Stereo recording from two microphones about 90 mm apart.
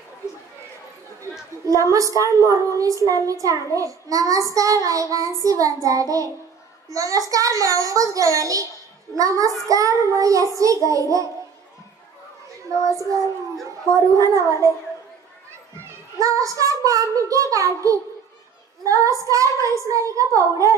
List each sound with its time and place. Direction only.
1.7 s a woman's voice: 35° right (ahead or behind)
12.8 s a woman's voice: 40° right (ahead or behind)
16.2 s a woman's voice: 35° right (ahead or behind)